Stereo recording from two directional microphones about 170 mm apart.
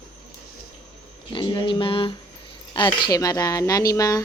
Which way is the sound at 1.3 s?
30° left (ahead or behind).